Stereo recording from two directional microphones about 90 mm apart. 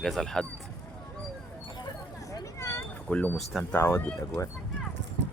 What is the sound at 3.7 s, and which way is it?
Speech, 25° left (ahead or behind).